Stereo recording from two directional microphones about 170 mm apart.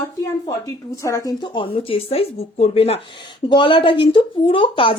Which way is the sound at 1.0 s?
20° left (ahead or behind).